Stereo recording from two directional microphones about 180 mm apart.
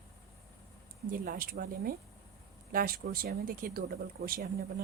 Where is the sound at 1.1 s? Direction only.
50° right (ahead or behind).